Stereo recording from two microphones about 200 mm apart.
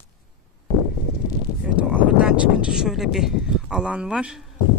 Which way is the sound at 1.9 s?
5° right (ahead or behind).